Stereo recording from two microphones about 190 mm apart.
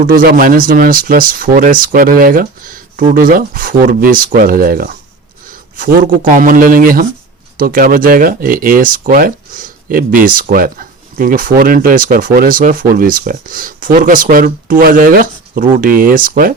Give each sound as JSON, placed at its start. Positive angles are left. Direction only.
{"t": 0.0, "sound": "speech", "side_deg": -50}